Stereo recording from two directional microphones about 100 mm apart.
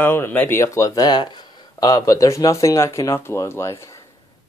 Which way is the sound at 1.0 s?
45° left (ahead or behind).